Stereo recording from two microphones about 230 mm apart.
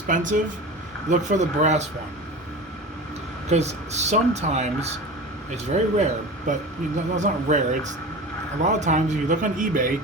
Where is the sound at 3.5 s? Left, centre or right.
Right.